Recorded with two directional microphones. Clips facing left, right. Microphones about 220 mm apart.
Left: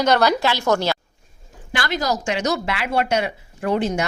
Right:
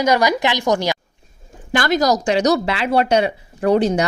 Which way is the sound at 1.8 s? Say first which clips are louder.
Right 6 dB; 45° right (ahead or behind).